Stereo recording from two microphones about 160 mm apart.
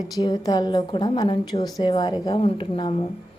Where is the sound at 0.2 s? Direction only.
25° left (ahead or behind).